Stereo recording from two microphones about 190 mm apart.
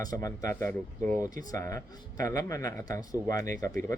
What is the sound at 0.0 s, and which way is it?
Speech, 20° left (ahead or behind).